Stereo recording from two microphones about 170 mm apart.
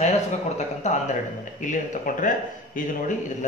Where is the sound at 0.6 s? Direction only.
45° left (ahead or behind).